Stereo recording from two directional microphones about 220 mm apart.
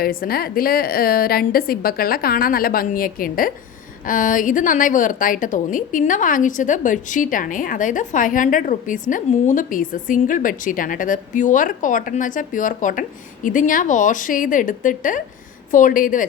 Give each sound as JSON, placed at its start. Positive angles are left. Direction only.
{"t": 0.0, "sound": "a woman's voice", "side_deg": 40}